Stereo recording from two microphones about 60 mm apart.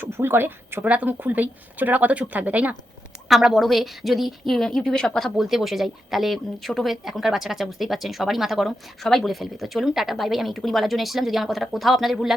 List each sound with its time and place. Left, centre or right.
0.0 s speech: right
3.2 s speech: centre
5.5 s speech: centre